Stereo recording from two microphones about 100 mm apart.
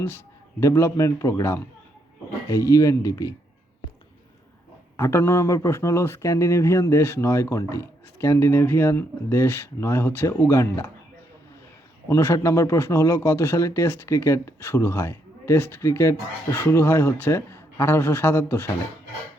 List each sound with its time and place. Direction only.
0.6 s a man's voice: 30° left (ahead or behind)
4.9 s speech: 25° left (ahead or behind)
12.0 s speech: 30° left (ahead or behind)